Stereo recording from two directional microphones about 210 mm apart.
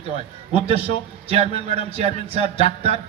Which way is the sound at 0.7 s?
30° right (ahead or behind).